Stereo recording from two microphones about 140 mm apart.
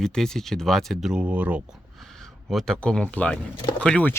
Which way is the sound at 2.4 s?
Centre (ahead or behind).